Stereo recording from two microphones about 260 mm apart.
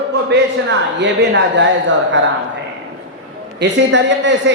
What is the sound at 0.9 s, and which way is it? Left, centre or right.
Speech, right.